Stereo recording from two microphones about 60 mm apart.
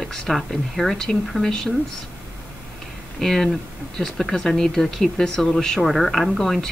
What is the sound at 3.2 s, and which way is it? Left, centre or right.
Speech, centre.